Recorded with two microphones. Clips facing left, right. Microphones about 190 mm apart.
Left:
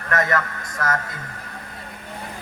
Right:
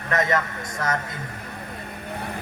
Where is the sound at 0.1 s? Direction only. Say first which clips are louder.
Left 1 dB; 20° right (ahead or behind).